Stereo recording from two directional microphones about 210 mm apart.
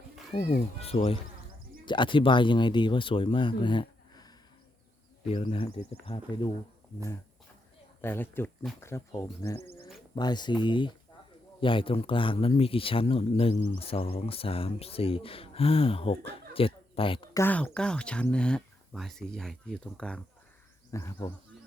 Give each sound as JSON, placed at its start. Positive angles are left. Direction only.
{"t": 0.3, "sound": "speech", "side_deg": 30}
{"t": 5.3, "sound": "speech", "side_deg": 25}
{"t": 8.0, "sound": "speech", "side_deg": 10}
{"t": 17.4, "sound": "speech", "side_deg": 10}
{"t": 20.9, "sound": "speech", "side_deg": 15}